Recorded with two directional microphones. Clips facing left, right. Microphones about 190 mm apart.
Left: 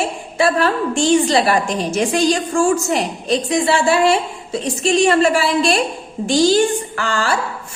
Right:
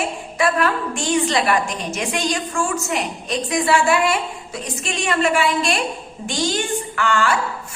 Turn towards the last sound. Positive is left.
turn(degrees=35)  # may be behind; listen again after turning